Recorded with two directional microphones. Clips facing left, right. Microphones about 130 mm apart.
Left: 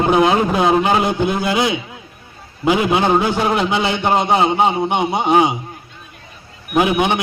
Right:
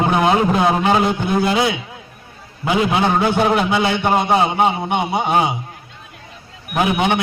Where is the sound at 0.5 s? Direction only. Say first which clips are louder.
Left 1 dB; 20° left (ahead or behind).